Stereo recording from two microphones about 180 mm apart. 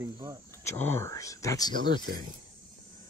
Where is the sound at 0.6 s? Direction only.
15° left (ahead or behind).